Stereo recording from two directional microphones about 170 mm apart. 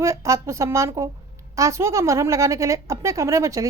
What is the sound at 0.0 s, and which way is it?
A woman's voice, 20° right (ahead or behind).